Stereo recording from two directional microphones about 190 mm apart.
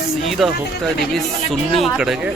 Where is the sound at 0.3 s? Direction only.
Centre (ahead or behind).